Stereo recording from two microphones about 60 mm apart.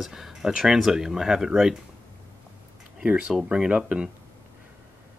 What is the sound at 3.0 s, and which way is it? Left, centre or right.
Speech, centre.